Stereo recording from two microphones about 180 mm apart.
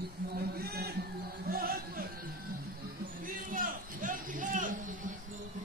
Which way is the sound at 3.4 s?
50° right (ahead or behind).